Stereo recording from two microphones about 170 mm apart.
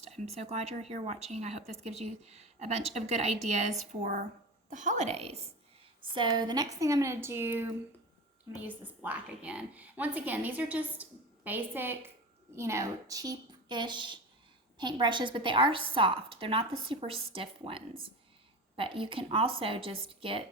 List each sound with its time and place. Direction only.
0.3 s a woman's voice: 40° right (ahead or behind)